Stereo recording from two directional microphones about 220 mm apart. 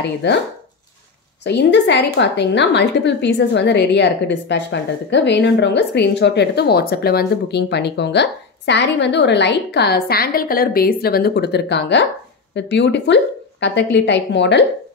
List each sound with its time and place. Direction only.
0.0 s a woman's voice: 50° left (ahead or behind)
1.4 s a woman's voice: 50° left (ahead or behind)